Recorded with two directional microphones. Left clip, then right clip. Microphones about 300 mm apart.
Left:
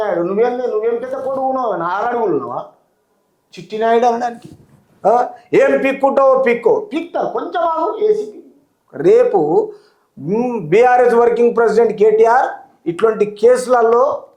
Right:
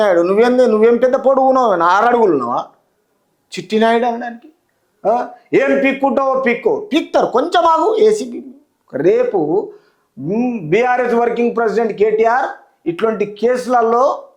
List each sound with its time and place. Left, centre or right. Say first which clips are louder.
0.0 s speech: right 4 dB; right
1.4 s speech: right 6 dB; right
3.9 s a man's voice: left 3 dB; right
6.9 s speech: right 5 dB; right
8.9 s a man's voice: left 2 dB; right